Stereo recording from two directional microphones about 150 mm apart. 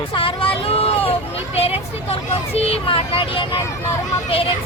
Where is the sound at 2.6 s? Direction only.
40° left (ahead or behind).